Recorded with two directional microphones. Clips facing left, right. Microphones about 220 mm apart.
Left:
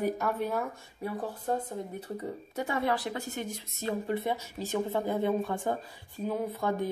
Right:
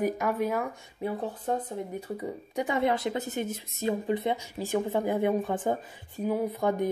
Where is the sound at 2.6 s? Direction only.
20° right (ahead or behind).